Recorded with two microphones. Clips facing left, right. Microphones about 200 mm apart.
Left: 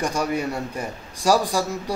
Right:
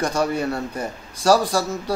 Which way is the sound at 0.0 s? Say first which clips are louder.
Right 2 dB; 10° left (ahead or behind).